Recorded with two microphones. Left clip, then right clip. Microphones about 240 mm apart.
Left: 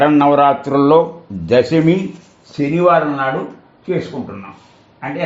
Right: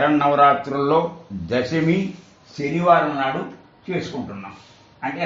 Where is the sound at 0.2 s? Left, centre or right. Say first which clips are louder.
Left 4 dB; left.